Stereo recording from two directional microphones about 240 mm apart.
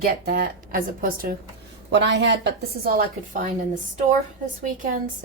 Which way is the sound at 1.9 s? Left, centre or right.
Right.